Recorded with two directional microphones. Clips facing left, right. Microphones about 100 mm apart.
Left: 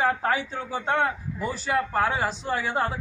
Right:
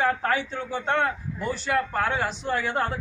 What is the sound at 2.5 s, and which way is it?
Speech, 35° left (ahead or behind).